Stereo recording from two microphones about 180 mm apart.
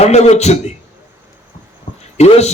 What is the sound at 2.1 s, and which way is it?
Speech, 35° left (ahead or behind).